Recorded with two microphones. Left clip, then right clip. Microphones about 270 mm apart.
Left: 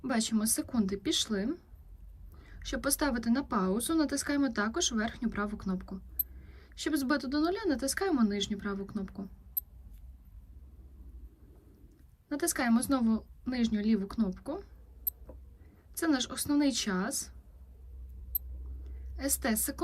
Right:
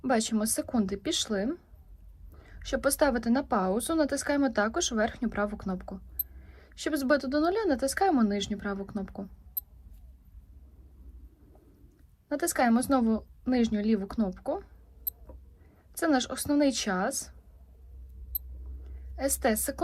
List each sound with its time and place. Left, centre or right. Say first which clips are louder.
0.0 s speech: right 5 dB; centre
12.3 s a woman's voice: right 4 dB; centre
19.1 s speech: right 6 dB; centre